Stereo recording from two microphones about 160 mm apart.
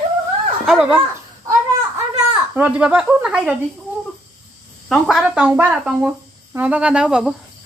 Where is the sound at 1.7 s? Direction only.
20° right (ahead or behind).